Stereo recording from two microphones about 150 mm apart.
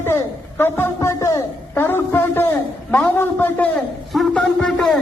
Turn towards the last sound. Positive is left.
turn(degrees=0)  # may be behind; listen again after turning